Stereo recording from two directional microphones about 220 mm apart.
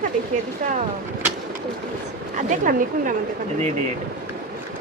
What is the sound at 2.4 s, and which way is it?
Speech, 35° right (ahead or behind).